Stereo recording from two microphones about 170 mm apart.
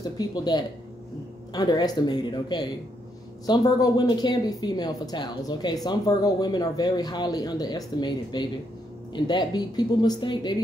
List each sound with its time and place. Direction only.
0.0 s speech: 25° left (ahead or behind)